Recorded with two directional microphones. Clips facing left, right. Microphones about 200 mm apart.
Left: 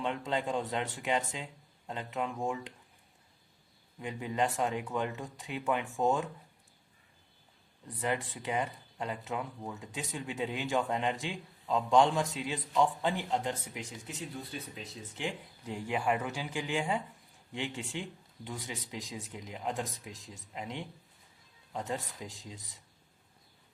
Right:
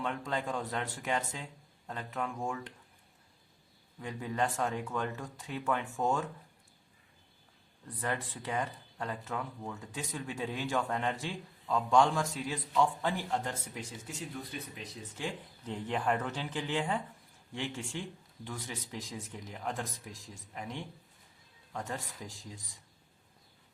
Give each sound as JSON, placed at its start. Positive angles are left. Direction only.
{"t": 0.0, "sound": "speech", "side_deg": 20}
{"t": 4.0, "sound": "speech", "side_deg": 15}
{"t": 7.9, "sound": "speech", "side_deg": 15}
{"t": 15.6, "sound": "speech", "side_deg": 10}